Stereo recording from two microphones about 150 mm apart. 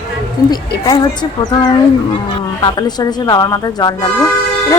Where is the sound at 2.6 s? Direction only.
30° left (ahead or behind).